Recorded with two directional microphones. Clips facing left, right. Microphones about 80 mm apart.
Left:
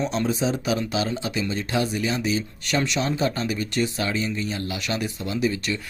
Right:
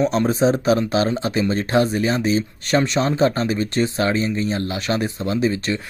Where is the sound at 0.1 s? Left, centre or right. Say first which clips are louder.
Right 6 dB; right.